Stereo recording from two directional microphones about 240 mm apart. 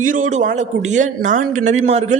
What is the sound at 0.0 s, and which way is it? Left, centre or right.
Speech, right.